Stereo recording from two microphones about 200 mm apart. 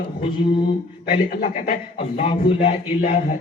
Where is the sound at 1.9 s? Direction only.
30° left (ahead or behind).